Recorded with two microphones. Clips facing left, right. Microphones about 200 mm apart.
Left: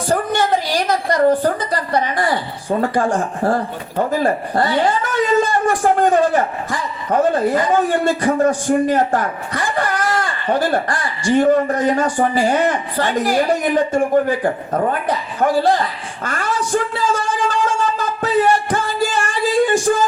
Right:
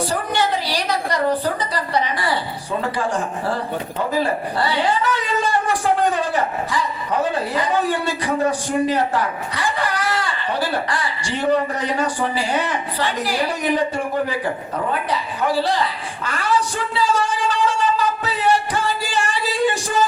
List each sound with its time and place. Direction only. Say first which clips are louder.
0.1 s a woman's voice: left 4 dB; 50° left (ahead or behind)